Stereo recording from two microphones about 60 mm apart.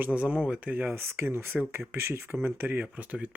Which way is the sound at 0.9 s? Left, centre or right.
Right.